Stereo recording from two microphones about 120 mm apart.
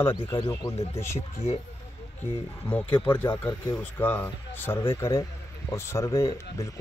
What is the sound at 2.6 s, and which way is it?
Speech, 15° left (ahead or behind).